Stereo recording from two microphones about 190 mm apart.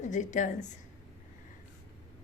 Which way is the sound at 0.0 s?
40° left (ahead or behind).